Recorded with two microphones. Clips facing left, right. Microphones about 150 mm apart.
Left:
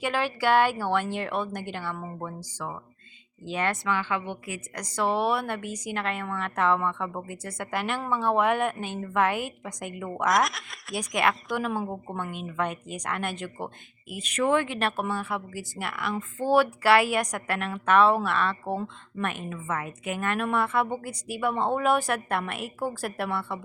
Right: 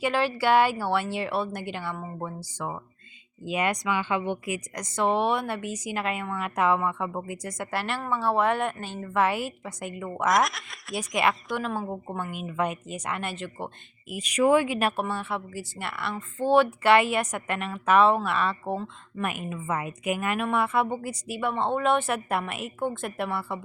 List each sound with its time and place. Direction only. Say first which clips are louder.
0.5 s speech: even; 5° right (ahead or behind)
3.5 s speech: right 1 dB; 15° right (ahead or behind)
5.0 s speech: right 1 dB; 5° left (ahead or behind)
19.3 s speech: right 2 dB; 10° right (ahead or behind)